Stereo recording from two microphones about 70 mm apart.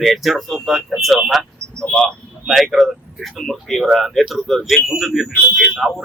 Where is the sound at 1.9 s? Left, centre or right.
Centre.